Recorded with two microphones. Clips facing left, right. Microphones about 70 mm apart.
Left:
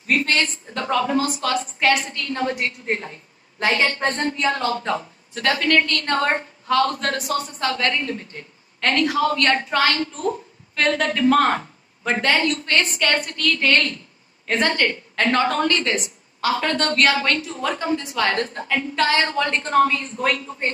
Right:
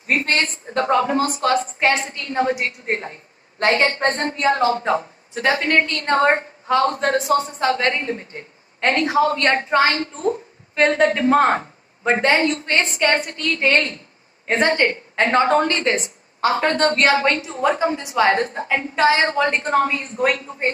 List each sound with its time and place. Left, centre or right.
0.0 s a woman's voice: right
4.4 s a woman's voice: centre